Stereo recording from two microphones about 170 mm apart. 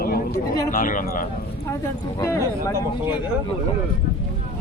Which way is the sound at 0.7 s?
50° left (ahead or behind).